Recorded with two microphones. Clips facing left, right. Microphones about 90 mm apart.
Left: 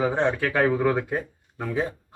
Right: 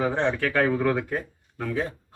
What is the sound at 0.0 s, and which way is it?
A man's voice, 5° left (ahead or behind).